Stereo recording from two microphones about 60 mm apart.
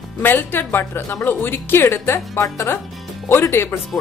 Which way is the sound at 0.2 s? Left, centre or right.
Left.